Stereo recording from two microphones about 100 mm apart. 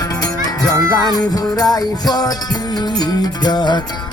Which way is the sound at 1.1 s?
40° left (ahead or behind).